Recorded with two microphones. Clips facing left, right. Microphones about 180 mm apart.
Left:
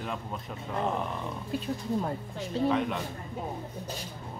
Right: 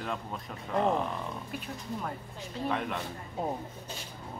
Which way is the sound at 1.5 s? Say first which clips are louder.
Left 7 dB; 30° left (ahead or behind).